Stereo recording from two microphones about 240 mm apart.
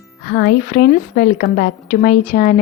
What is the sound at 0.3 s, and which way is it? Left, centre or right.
A woman's voice, left.